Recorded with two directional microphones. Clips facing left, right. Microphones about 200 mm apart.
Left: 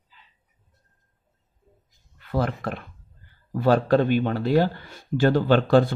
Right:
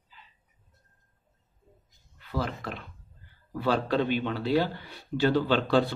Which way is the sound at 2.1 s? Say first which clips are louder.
Left 6 dB; 55° left (ahead or behind).